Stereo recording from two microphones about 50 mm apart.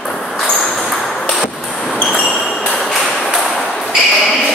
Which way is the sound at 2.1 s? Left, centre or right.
Left.